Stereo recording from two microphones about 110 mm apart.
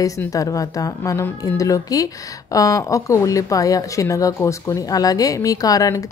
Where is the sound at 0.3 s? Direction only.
30° left (ahead or behind).